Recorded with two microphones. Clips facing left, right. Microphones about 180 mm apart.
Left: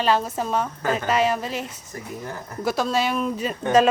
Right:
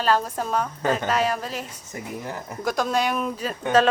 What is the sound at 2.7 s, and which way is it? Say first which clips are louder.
Speech: left 1 dB; 5° left (ahead or behind).